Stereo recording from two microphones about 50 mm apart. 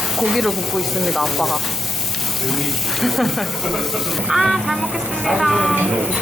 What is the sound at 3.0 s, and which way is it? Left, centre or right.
Speech, centre.